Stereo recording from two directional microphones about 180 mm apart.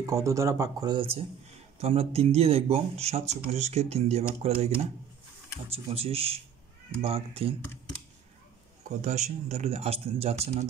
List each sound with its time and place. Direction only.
0.0 s speech: 15° right (ahead or behind); by 4.6 s 35° right (ahead or behind)
5.7 s speech: 35° right (ahead or behind)
8.8 s speech: 45° right (ahead or behind)